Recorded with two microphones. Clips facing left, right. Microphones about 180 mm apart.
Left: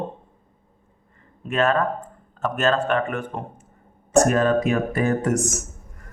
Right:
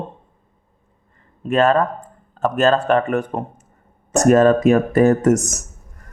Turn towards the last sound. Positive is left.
turn(degrees=-40)  # may be behind; listen again after turning